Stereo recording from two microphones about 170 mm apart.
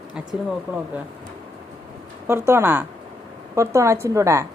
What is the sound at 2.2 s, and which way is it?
A woman's voice, 15° right (ahead or behind).